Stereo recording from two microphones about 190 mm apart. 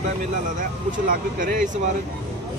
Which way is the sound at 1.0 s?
45° right (ahead or behind).